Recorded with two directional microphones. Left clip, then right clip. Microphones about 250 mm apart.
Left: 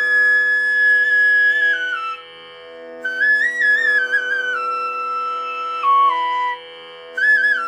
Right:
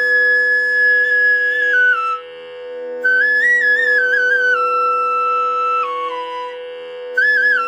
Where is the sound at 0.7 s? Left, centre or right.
Left.